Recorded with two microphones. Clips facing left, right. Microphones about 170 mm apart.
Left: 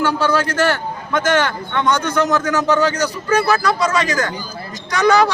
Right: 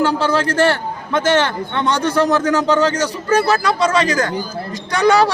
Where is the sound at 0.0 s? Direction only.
35° right (ahead or behind).